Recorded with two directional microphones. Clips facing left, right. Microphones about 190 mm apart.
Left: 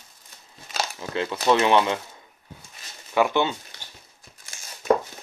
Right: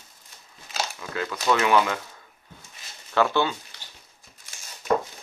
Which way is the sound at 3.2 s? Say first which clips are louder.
Left 1 dB; 20° left (ahead or behind).